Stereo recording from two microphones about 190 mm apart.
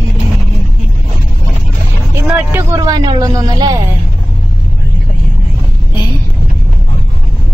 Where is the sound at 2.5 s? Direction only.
20° right (ahead or behind).